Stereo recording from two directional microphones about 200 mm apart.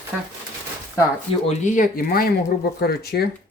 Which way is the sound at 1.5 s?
40° left (ahead or behind).